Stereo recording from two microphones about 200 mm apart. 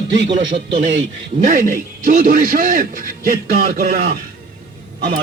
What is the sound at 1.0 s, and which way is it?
A man's voice, 40° right (ahead or behind).